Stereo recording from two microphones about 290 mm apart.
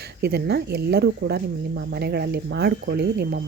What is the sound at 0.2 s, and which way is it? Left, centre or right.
Speech, right.